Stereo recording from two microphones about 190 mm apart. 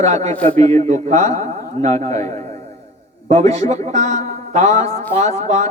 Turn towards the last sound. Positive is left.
turn(degrees=-35)  # may be behind; listen again after turning